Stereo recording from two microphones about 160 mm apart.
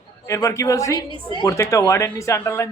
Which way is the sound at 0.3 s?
20° left (ahead or behind).